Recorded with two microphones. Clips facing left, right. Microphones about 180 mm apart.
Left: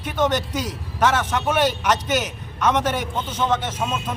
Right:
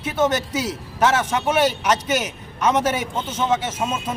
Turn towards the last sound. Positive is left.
turn(degrees=-10)  # may be behind; listen again after turning